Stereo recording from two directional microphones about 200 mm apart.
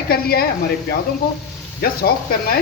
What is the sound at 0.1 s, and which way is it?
Speech, 50° left (ahead or behind).